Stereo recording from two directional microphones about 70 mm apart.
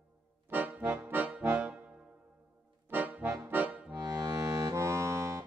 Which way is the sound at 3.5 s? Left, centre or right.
Right.